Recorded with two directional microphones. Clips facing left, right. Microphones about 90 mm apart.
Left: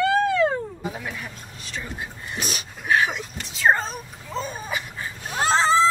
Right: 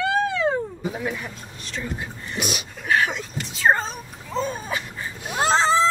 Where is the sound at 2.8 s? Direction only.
5° left (ahead or behind).